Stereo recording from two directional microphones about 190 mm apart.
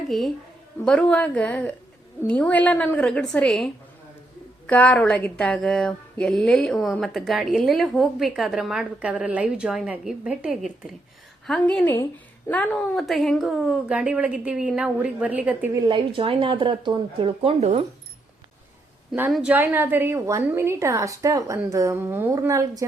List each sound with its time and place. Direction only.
0.1 s a woman's voice: centre (ahead or behind)
15.9 s speech: 25° right (ahead or behind)
19.3 s a woman's voice: 5° right (ahead or behind)